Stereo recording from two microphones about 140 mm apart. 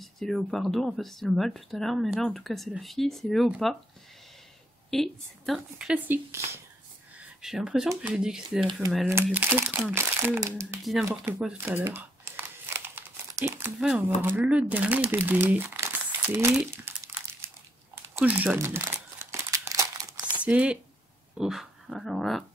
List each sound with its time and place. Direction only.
0.0 s speech: centre (ahead or behind)
4.9 s speech: centre (ahead or behind); by 6.6 s 15° right (ahead or behind)
7.2 s speech: 5° right (ahead or behind)
9.1 s speech: 15° right (ahead or behind)
10.8 s speech: centre (ahead or behind)
11.5 s crumpling: 15° right (ahead or behind)
13.7 s speech: centre (ahead or behind)
18.1 s crumpling: 10° right (ahead or behind); by 20.4 s 30° right (ahead or behind)
20.4 s speech: 10° right (ahead or behind)
21.4 s dog: centre (ahead or behind)